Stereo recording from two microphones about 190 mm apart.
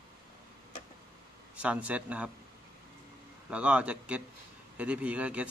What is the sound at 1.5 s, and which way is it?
Speech, 5° right (ahead or behind).